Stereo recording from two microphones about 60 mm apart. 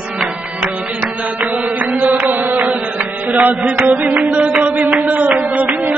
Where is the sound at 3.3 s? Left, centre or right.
Right.